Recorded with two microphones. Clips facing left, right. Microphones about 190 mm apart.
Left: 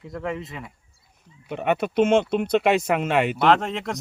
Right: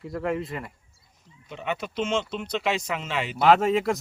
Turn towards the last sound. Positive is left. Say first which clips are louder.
# right 2 dB
turn(degrees=-5)  # may be behind; listen again after turning